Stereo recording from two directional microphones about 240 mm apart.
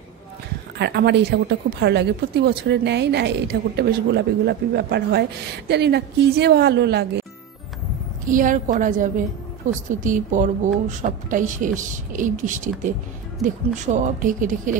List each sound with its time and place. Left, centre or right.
0.7 s a woman's voice: right
8.3 s a woman's voice: right
13.9 s a woman's voice: right